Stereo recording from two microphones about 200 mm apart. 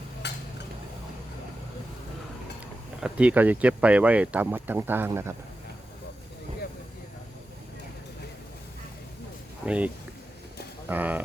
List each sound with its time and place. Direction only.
0.2 s stir: 60° left (ahead or behind)
3.0 s speech: 5° right (ahead or behind)
9.6 s speech: 5° right (ahead or behind)